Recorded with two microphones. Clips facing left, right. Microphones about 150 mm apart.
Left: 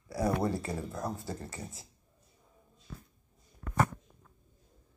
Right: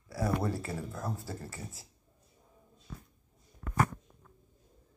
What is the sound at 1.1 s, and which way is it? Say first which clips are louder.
Mantra: left 1 dB; 5° right (ahead or behind).